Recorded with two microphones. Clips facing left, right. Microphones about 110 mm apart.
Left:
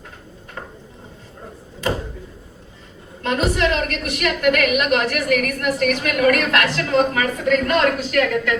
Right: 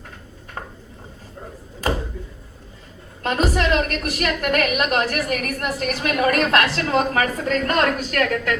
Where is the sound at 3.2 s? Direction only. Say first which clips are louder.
Left 1 dB; 40° right (ahead or behind).